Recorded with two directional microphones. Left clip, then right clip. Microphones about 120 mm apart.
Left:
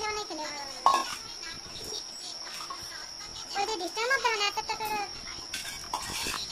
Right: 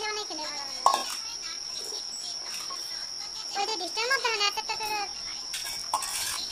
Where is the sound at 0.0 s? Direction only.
Centre (ahead or behind).